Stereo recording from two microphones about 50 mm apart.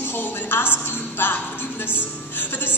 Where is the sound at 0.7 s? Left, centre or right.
Left.